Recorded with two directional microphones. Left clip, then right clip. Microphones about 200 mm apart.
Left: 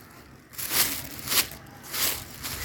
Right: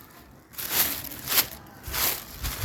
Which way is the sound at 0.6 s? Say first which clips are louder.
Left 1 dB; 30° right (ahead or behind).